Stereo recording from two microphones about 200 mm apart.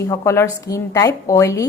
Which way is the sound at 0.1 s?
15° left (ahead or behind).